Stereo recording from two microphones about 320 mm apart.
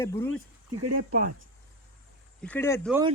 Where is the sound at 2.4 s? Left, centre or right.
Centre.